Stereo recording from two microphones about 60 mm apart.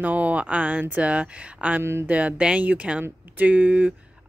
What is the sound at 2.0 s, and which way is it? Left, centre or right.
Speech, right.